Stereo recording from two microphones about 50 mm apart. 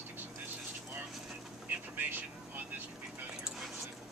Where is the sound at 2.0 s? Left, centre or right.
Right.